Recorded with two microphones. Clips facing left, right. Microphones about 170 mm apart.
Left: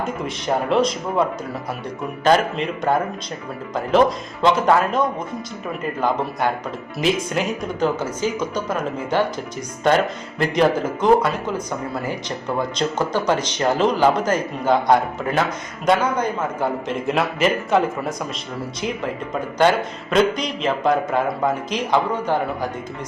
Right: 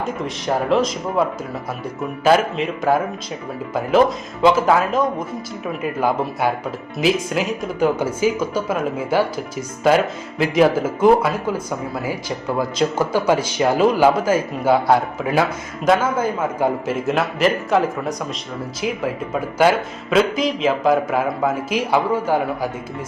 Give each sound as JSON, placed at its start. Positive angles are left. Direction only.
{"t": 0.0, "sound": "speech", "side_deg": 0}
{"t": 4.4, "sound": "speech", "side_deg": -5}